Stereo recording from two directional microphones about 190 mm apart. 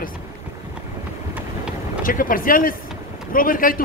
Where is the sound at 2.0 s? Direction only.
45° left (ahead or behind).